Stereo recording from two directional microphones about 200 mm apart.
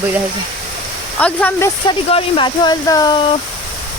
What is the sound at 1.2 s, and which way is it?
Speech, 10° left (ahead or behind).